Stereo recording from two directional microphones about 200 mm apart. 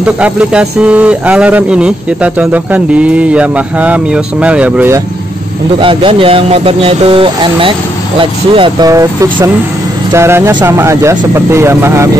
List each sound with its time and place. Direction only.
0.0 s speech: 5° right (ahead or behind)
5.8 s speech: 25° right (ahead or behind)